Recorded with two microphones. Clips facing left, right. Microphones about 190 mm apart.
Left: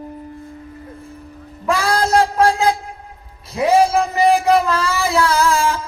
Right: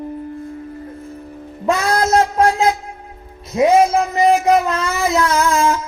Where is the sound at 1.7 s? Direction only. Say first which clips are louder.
Right 1 dB; 30° left (ahead or behind).